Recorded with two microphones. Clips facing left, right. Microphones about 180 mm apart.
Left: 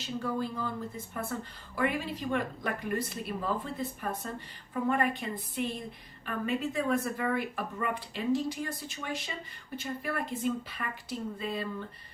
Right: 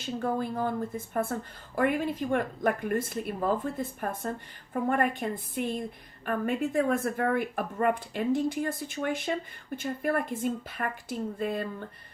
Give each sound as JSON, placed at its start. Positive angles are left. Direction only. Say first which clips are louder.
{"t": 0.0, "sound": "speech", "louder": "right 3 dB", "side_deg": -50}